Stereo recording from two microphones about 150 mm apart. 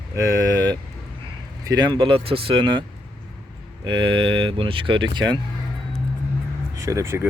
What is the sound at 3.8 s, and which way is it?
Speech, 30° right (ahead or behind).